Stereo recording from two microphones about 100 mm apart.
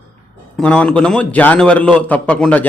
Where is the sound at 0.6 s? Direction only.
10° left (ahead or behind).